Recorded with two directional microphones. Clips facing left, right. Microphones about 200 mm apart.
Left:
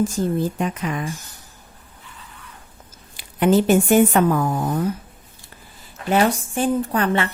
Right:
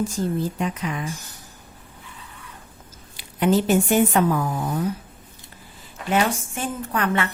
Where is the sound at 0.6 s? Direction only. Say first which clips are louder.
Left 2 dB; 50° left (ahead or behind).